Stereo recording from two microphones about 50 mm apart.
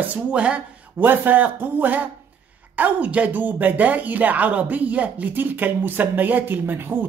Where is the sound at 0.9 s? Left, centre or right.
Right.